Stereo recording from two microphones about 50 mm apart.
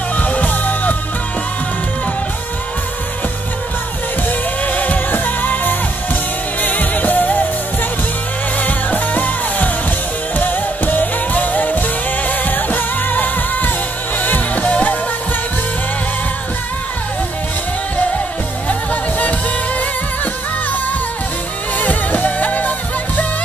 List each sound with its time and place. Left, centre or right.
0.1 s music: left
4.6 s music: left
8.5 s music: left
18.7 s music: left
21.7 s music: left